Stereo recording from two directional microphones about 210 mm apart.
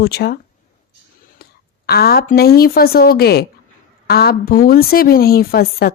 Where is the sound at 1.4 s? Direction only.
45° left (ahead or behind).